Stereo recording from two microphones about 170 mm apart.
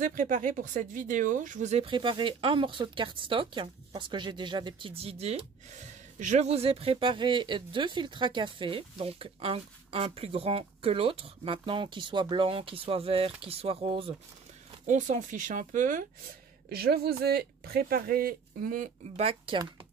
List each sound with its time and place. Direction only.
0.0 s speech: 50° right (ahead or behind); by 14.1 s 35° right (ahead or behind)
14.9 s speech: 45° right (ahead or behind)
16.6 s speech: 65° right (ahead or behind)
19.1 s speech: 35° right (ahead or behind)